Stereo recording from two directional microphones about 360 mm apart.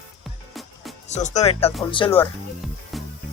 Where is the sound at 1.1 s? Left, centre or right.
Centre.